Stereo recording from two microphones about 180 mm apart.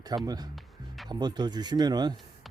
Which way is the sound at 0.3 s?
20° right (ahead or behind).